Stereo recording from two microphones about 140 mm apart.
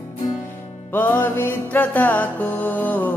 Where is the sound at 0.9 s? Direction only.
15° left (ahead or behind).